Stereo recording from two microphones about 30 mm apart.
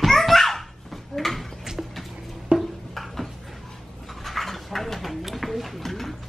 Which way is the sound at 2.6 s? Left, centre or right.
Centre.